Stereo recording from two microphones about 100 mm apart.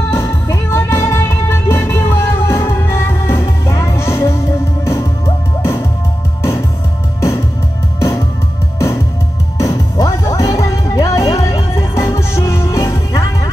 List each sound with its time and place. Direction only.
0.1 s music: 25° left (ahead or behind)
7.2 s music: 30° left (ahead or behind)
8.7 s music: 30° left (ahead or behind)